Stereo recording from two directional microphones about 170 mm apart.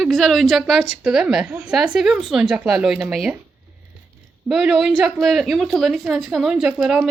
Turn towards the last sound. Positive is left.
turn(degrees=-5)  # may be behind; listen again after turning